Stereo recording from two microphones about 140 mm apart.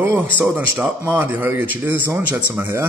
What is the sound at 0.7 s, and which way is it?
Speech, 10° right (ahead or behind).